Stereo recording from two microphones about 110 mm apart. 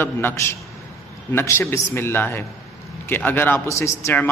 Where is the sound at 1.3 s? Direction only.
20° left (ahead or behind).